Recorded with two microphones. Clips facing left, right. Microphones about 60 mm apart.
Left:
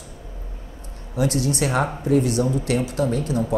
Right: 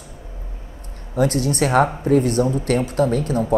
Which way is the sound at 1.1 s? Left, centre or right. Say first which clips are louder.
Right 3 dB; right.